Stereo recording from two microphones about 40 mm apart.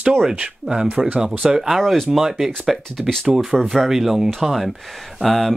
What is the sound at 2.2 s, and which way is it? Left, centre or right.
Speech, centre.